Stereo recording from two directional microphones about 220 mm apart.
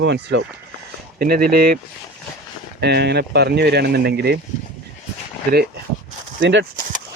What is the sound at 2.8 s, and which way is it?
Speech, 50° right (ahead or behind).